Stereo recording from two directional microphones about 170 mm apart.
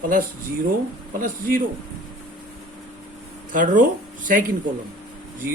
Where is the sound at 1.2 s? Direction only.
55° right (ahead or behind).